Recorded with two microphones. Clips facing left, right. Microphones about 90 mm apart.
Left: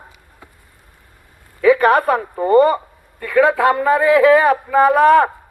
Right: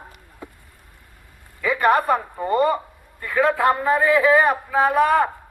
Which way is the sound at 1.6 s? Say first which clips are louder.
Left 6 dB; 90° left.